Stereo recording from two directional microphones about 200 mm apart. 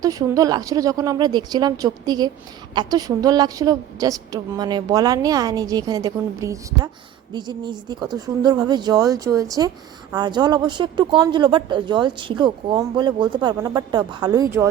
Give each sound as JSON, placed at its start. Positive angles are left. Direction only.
{"t": 0.0, "sound": "speech", "side_deg": -20}